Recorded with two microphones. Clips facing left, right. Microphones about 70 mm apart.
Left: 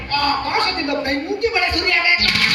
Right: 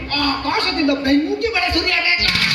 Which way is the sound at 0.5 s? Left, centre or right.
Left.